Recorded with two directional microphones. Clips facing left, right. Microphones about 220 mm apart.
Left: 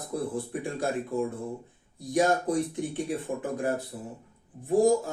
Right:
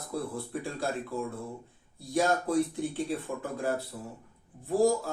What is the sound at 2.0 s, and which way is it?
Speech, 15° left (ahead or behind).